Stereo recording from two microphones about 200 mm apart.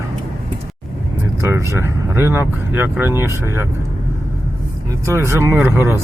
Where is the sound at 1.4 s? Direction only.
15° right (ahead or behind).